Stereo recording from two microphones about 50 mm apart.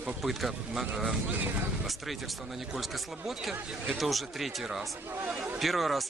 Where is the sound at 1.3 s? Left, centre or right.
Right.